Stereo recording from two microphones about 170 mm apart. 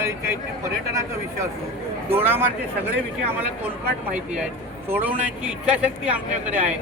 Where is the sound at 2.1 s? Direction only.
10° right (ahead or behind).